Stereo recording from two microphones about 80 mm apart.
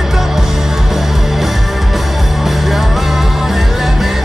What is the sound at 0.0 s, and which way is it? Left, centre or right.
Music, centre.